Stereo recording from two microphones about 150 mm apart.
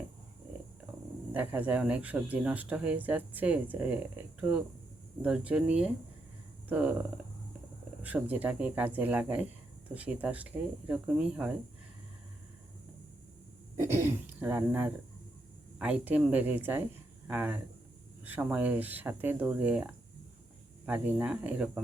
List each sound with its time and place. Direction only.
1.3 s speech: 10° right (ahead or behind)
8.0 s speech: 10° right (ahead or behind)
13.7 s speech: 15° right (ahead or behind)